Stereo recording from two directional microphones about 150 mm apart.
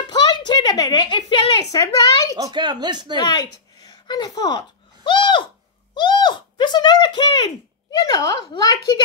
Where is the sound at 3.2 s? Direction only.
30° left (ahead or behind).